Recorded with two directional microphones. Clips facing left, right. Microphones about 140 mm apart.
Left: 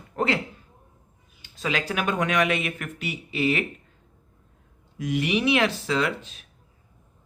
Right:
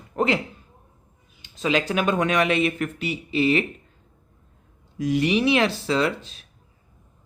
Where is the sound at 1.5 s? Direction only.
20° right (ahead or behind).